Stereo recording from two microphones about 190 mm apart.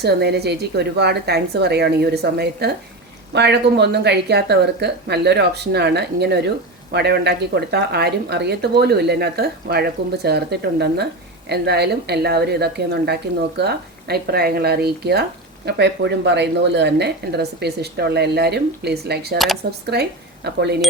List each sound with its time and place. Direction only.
0.0 s speech: 60° right (ahead or behind)